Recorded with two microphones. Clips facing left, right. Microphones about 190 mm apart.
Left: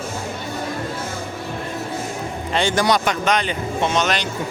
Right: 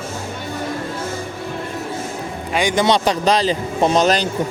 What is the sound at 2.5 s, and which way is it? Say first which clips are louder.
A man's voice: right 2 dB; 15° right (ahead or behind).